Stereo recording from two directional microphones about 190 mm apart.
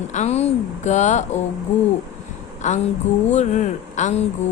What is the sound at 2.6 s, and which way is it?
A woman's voice, 40° left (ahead or behind).